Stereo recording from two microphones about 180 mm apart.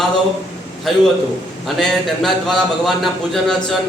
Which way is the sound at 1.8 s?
Centre (ahead or behind).